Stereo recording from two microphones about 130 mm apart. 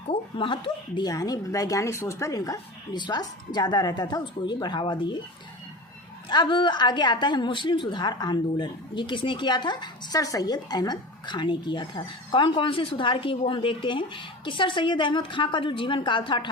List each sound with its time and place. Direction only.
0.1 s a woman's voice: 40° left (ahead or behind)
1.1 s a woman's voice: 30° left (ahead or behind)
6.2 s a woman's voice: 35° left (ahead or behind)